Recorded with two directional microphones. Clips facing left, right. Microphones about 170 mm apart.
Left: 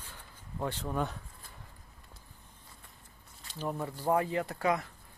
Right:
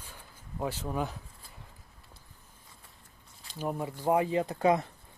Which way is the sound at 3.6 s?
10° right (ahead or behind).